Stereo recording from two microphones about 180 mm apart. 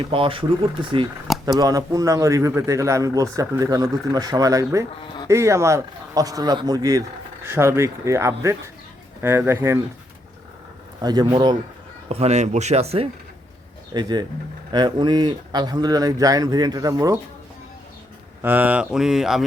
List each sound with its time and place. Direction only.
0.0 s speech: 30° right (ahead or behind); by 9.7 s 15° right (ahead or behind)
11.0 s speech: 20° right (ahead or behind)
12.0 s speech: 35° right (ahead or behind)
13.9 s speech: 25° right (ahead or behind)
18.4 s mantra: 10° right (ahead or behind)